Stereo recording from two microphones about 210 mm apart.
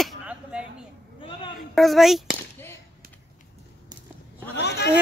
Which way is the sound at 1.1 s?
25° left (ahead or behind).